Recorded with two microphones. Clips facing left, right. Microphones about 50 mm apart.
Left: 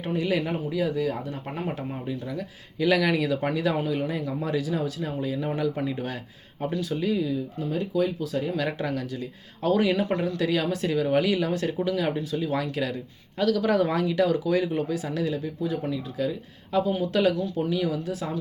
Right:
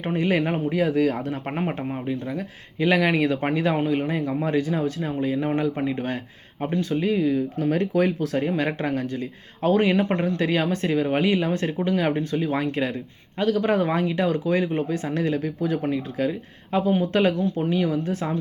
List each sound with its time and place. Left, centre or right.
0.0 s speech: right
1.5 s speech: right
8.4 s speech: right